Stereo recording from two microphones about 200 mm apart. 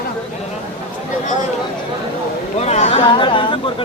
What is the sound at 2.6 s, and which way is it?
Speech, 35° left (ahead or behind).